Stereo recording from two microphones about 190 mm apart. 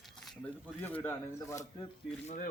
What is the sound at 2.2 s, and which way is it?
Speech, 45° left (ahead or behind).